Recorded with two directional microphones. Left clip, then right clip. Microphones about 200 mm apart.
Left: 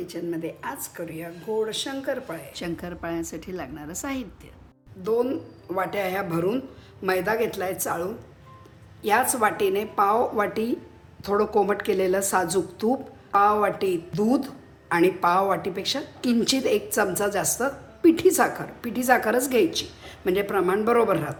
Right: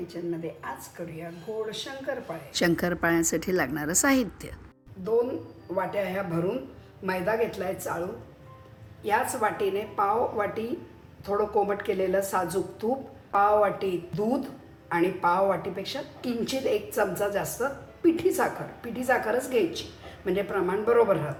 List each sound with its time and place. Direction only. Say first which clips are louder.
0.1 s a woman's voice: left 3 dB; 50° left (ahead or behind)
2.6 s a woman's voice: right 11 dB; 30° right (ahead or behind)
5.7 s a woman's voice: left 2 dB; 50° left (ahead or behind)
9.0 s a woman's voice: left 4 dB; 50° left (ahead or behind)